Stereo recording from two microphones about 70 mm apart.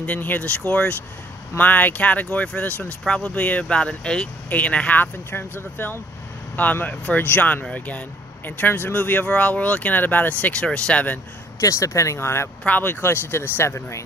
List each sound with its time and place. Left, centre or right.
0.0 s speech: left
11.6 s speech: left
12.6 s speech: left